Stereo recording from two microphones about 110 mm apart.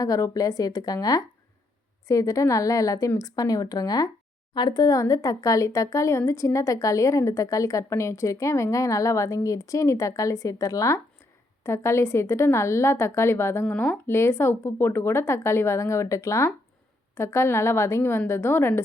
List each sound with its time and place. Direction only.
0.0 s speech: 35° left (ahead or behind)